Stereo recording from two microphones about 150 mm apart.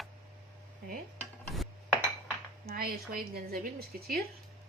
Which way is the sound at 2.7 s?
90° right.